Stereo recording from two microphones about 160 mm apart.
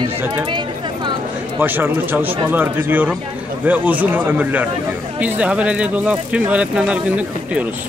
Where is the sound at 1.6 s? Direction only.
10° right (ahead or behind).